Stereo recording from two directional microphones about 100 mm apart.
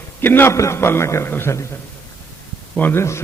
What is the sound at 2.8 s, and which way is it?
Speech, 20° left (ahead or behind).